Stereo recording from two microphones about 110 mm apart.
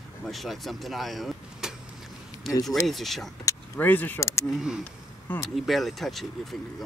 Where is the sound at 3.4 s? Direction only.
15° left (ahead or behind).